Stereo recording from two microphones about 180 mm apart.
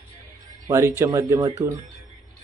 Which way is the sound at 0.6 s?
15° right (ahead or behind).